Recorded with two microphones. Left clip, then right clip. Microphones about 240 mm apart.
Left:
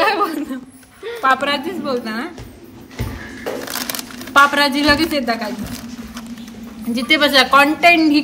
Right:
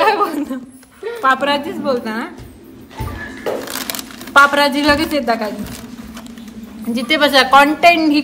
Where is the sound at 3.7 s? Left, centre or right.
Centre.